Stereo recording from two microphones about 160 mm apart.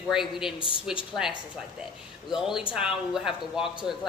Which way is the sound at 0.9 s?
35° left (ahead or behind).